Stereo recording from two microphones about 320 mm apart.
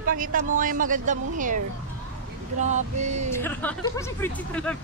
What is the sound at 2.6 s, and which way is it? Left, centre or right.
Speech, right.